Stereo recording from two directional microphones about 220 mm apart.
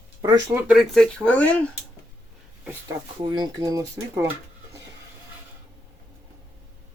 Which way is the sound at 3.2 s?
20° right (ahead or behind).